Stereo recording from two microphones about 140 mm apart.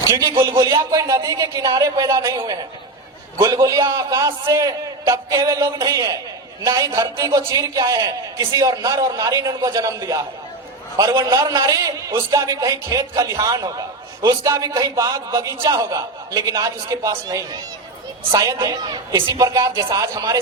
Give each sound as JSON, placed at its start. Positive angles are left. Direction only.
{"t": 0.0, "sound": "a man's voice", "side_deg": -20}